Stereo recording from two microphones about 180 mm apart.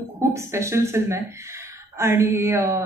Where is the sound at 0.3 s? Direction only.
15° right (ahead or behind).